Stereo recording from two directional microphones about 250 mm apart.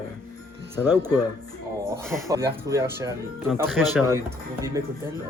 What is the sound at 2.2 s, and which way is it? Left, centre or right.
Speech, centre.